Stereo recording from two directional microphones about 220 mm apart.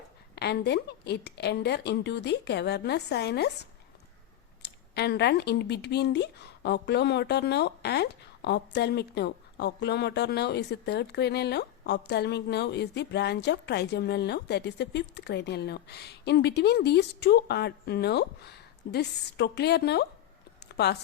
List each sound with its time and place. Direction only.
0.3 s speech: 50° left (ahead or behind)